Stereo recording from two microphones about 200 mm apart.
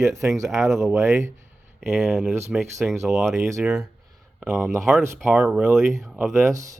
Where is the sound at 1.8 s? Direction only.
Centre (ahead or behind).